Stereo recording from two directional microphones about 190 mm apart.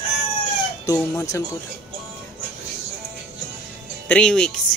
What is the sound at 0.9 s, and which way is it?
Speech, 15° left (ahead or behind).